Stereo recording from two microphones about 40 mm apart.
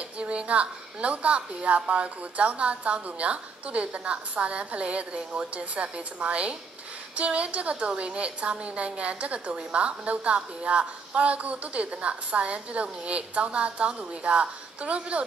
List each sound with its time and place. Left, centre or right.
0.2 s a woman's voice: right